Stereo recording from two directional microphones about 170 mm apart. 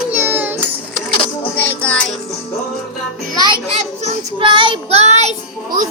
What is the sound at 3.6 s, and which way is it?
Child singing, 35° right (ahead or behind).